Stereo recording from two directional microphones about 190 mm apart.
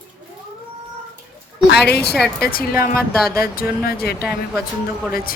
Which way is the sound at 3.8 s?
55° left (ahead or behind).